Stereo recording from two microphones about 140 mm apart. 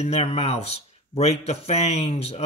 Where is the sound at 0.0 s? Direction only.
45° left (ahead or behind).